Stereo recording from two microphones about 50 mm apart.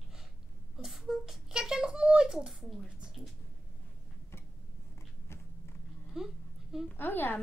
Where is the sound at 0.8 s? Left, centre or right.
Centre.